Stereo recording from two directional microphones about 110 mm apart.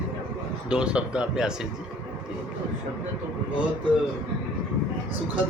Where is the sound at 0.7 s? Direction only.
10° right (ahead or behind).